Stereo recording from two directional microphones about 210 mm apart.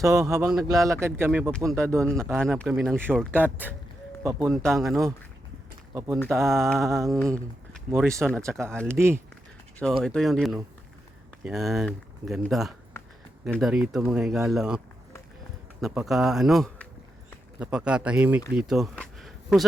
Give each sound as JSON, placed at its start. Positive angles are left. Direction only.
{"t": 0.0, "sound": "speech", "side_deg": -15}
{"t": 0.4, "sound": "speech", "side_deg": -5}
{"t": 0.7, "sound": "speech", "side_deg": -15}
{"t": 2.0, "sound": "speech", "side_deg": 5}
{"t": 2.3, "sound": "speech", "side_deg": -10}
{"t": 2.6, "sound": "speech", "side_deg": 0}
{"t": 4.5, "sound": "speech", "side_deg": 0}
{"t": 5.9, "sound": "speech", "side_deg": -15}
{"t": 6.5, "sound": "speech", "side_deg": 0}
{"t": 8.0, "sound": "speech", "side_deg": -15}
{"t": 10.0, "sound": "speech", "side_deg": 0}
{"t": 12.9, "sound": "a sound", "side_deg": 10}
{"t": 13.4, "sound": "speech", "side_deg": 0}
{"t": 15.8, "sound": "speech", "side_deg": 0}